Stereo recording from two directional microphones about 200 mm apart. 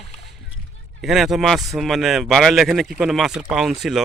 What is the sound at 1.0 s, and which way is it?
Speech, centre (ahead or behind).